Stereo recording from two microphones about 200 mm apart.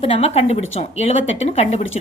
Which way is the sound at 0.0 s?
30° left (ahead or behind).